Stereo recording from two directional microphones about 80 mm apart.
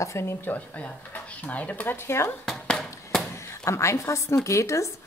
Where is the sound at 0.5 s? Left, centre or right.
Centre.